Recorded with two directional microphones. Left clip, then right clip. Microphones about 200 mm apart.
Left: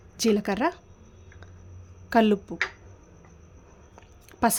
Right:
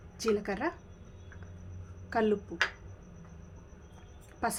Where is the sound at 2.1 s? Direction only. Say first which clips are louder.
Left 8 dB; 60° left (ahead or behind).